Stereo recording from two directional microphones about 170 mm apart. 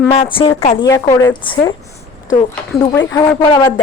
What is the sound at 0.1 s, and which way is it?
Speech, 35° left (ahead or behind).